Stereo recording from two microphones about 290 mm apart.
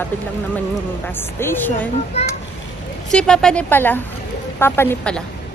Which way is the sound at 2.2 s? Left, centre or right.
Left.